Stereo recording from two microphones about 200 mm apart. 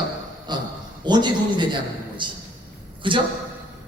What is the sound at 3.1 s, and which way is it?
Speech, 25° right (ahead or behind).